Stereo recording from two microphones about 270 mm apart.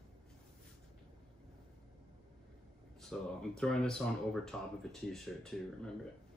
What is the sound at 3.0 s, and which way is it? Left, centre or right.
Speech, centre.